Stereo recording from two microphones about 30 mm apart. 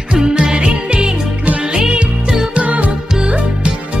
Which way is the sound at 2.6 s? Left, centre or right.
Right.